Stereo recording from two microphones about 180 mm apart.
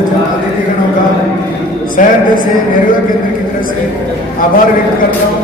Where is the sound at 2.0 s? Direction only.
45° left (ahead or behind).